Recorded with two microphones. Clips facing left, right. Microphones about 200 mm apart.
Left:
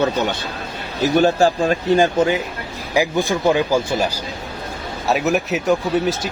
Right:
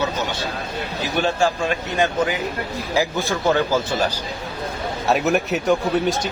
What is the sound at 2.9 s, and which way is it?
Speech, 15° left (ahead or behind).